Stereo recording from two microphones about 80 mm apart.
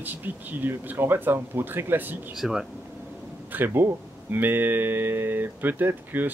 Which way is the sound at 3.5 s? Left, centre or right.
Right.